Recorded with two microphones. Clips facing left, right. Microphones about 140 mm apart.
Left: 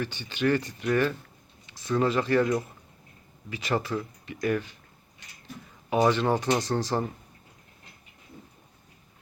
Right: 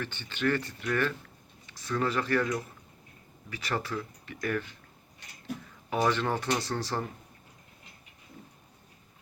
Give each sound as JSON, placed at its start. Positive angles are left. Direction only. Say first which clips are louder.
{"t": 0.0, "sound": "speech", "louder": "left 3 dB", "side_deg": 10}
{"t": 5.9, "sound": "speech", "louder": "left 5 dB", "side_deg": 15}